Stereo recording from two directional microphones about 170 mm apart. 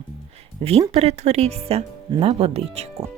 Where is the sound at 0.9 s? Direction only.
40° right (ahead or behind).